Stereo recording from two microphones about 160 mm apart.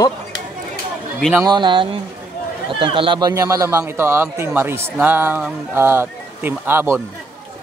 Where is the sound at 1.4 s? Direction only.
25° right (ahead or behind).